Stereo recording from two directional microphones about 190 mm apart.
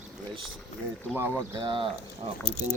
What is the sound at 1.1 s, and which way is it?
Speech, 10° right (ahead or behind).